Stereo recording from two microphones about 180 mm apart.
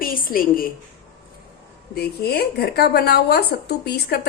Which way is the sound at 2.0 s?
60° left (ahead or behind).